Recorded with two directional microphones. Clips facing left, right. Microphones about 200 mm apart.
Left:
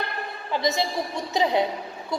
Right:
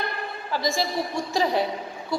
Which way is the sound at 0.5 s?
20° left (ahead or behind).